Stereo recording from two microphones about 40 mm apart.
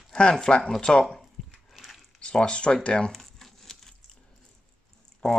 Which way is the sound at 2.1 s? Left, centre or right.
Left.